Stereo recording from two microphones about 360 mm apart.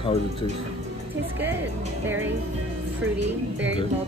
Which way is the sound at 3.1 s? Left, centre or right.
Right.